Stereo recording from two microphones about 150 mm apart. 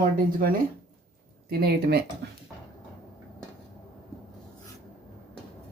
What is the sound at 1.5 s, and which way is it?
Speech, 90° right.